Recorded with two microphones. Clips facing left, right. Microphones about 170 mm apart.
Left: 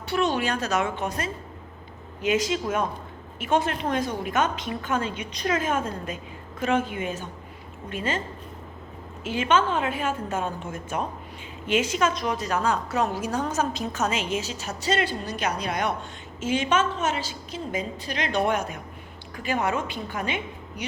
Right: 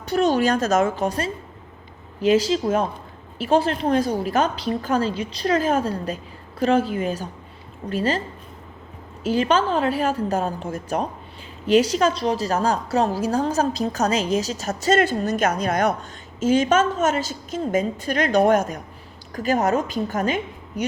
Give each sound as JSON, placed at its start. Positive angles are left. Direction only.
{"t": 0.0, "sound": "a woman's voice", "side_deg": -40}
{"t": 9.2, "sound": "a woman's voice", "side_deg": -35}